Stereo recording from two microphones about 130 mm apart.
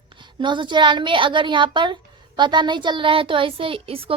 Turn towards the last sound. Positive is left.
turn(degrees=-45)  # may be behind; listen again after turning